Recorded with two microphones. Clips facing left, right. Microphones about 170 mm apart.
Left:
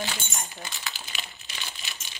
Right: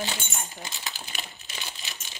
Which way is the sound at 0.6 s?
20° right (ahead or behind).